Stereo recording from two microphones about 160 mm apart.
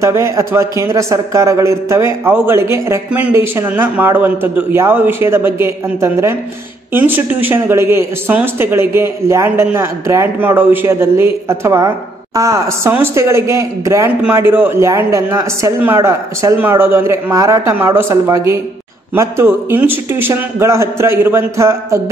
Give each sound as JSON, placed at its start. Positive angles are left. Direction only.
{"t": 0.0, "sound": "a man's voice", "side_deg": -15}